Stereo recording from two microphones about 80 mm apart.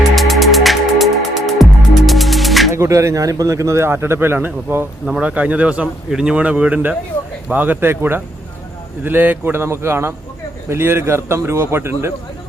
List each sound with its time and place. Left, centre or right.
0.2 s music: centre
2.7 s speech: right